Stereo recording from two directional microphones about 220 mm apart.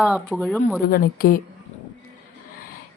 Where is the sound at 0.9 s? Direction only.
40° left (ahead or behind).